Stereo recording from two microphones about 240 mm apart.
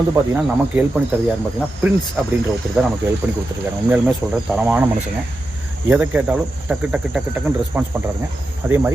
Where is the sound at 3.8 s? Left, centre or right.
Centre.